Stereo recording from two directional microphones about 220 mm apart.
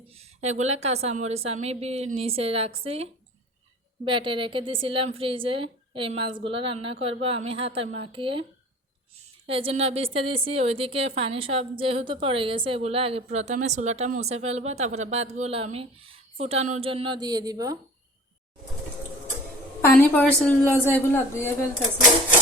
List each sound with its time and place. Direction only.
0.1 s a woman's voice: 30° right (ahead or behind)
9.5 s a woman's voice: 25° right (ahead or behind)
19.8 s a woman's voice: 10° left (ahead or behind)